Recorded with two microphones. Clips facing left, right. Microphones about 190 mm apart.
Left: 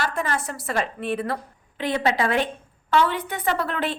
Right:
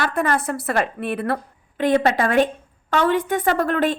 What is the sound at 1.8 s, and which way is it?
A woman's voice, 50° right (ahead or behind).